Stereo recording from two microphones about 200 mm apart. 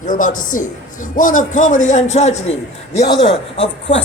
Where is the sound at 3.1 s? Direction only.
60° left (ahead or behind).